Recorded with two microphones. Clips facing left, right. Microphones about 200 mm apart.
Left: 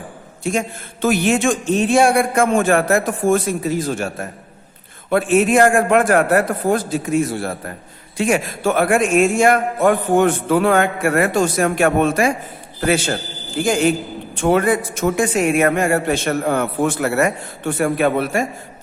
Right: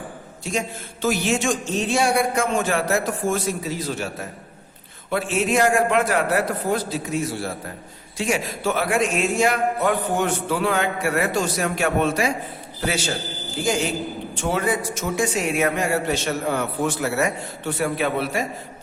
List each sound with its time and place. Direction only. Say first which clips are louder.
0.4 s a man's voice: left 5 dB; 55° left (ahead or behind)
13.7 s a man's voice: left 6 dB; 55° left (ahead or behind)